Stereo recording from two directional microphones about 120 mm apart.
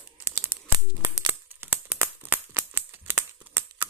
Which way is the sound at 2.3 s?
20° right (ahead or behind).